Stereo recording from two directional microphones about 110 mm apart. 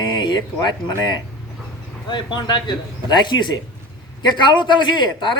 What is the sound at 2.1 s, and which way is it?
Speech, 45° left (ahead or behind).